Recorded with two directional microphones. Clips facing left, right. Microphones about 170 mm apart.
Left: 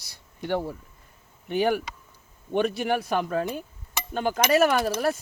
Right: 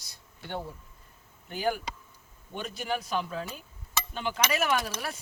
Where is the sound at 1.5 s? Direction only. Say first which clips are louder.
Left 7 dB; 65° left (ahead or behind).